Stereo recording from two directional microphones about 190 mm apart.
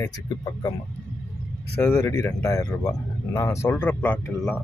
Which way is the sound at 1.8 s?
10° left (ahead or behind).